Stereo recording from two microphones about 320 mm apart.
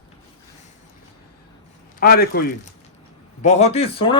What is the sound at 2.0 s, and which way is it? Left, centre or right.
Speech, left.